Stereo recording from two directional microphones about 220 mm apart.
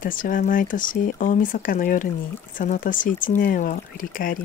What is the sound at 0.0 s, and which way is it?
Speech, 40° left (ahead or behind).